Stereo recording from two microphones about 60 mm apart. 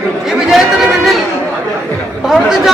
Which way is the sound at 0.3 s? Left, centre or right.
Centre.